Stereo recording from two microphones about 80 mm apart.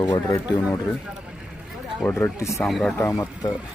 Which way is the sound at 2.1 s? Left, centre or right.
Left.